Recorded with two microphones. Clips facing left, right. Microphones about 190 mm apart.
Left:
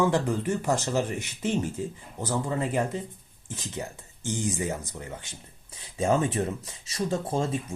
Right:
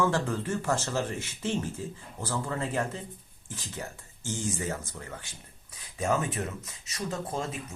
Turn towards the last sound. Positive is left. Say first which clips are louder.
# left 6 dB
turn(degrees=30)  # may be behind; listen again after turning